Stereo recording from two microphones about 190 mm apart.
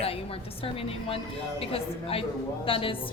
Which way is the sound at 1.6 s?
30° left (ahead or behind).